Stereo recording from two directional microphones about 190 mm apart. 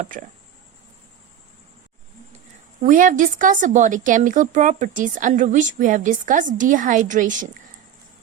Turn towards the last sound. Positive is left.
turn(degrees=-40)  # may be behind; listen again after turning